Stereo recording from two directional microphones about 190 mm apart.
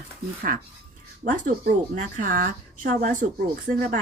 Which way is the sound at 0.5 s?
50° right (ahead or behind).